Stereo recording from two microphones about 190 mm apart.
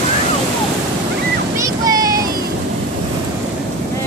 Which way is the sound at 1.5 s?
20° right (ahead or behind).